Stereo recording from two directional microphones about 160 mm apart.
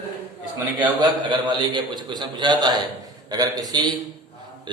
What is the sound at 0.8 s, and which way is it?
A man's voice, 30° right (ahead or behind).